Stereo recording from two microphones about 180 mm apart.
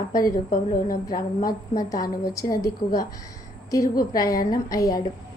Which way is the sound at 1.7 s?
20° left (ahead or behind).